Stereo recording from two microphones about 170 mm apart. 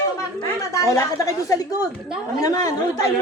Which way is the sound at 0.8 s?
20° left (ahead or behind).